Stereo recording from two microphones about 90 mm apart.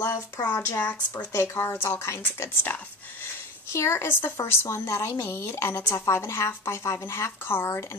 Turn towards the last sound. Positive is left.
turn(degrees=25)  # may be behind; listen again after turning